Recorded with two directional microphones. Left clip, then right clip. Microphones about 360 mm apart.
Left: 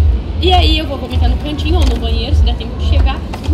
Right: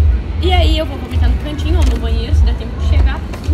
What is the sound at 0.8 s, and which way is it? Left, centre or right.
Speech, right.